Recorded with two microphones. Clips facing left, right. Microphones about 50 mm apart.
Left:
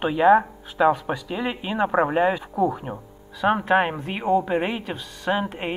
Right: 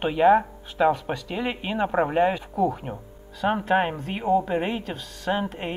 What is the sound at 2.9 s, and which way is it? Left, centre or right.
A woman's voice, centre.